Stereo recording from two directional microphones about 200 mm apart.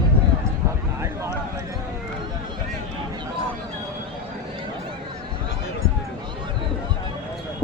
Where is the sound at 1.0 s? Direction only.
15° right (ahead or behind).